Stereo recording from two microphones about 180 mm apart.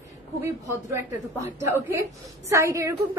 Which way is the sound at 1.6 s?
15° right (ahead or behind).